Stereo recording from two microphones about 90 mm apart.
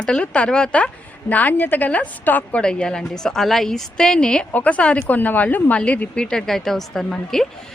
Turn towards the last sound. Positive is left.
turn(degrees=5)  # may be behind; listen again after turning